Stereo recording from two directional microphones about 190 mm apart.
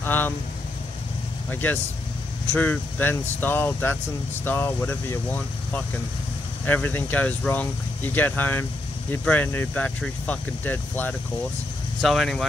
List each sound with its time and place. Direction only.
0.0 s speech: 10° left (ahead or behind)
1.5 s speech: 10° left (ahead or behind)